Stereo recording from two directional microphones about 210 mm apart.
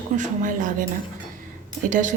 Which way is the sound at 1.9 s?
35° right (ahead or behind).